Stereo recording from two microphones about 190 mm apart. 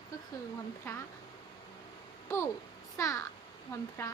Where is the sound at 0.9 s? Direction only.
15° left (ahead or behind).